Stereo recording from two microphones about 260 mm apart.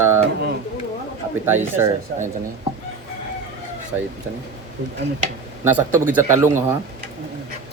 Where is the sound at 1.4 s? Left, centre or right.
Centre.